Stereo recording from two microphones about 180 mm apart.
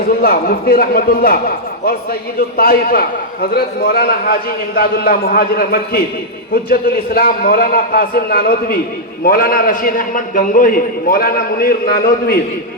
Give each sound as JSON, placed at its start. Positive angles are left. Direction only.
{"t": 0.0, "sound": "a man's voice", "side_deg": 55}